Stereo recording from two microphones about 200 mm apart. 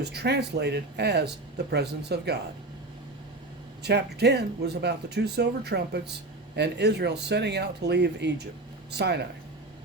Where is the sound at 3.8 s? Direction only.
55° right (ahead or behind).